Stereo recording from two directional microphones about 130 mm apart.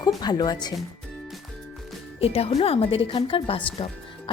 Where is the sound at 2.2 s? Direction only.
50° left (ahead or behind).